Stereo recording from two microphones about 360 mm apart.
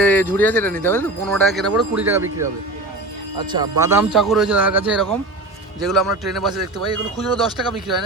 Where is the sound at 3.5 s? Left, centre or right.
Centre.